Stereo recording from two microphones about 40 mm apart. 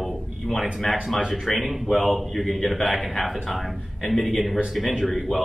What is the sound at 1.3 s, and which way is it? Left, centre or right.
A man's voice, centre.